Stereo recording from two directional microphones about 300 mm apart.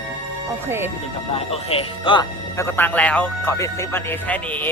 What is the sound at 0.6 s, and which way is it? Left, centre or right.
Speech, centre.